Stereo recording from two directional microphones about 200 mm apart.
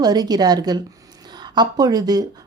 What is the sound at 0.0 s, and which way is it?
Speech, 20° right (ahead or behind).